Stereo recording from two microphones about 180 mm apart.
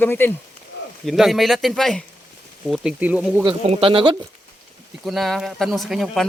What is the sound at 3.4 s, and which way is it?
Speech, 30° right (ahead or behind).